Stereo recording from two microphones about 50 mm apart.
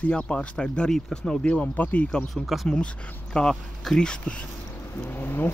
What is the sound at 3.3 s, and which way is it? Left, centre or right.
Speech, centre.